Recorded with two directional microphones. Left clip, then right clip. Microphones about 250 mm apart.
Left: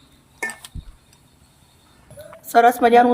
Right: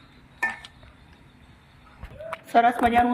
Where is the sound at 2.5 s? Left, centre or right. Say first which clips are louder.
Left 6 dB; centre.